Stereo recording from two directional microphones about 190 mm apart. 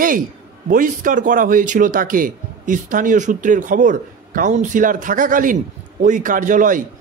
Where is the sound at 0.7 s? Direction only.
45° right (ahead or behind).